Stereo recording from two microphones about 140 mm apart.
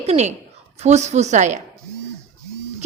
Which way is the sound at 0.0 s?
50° right (ahead or behind).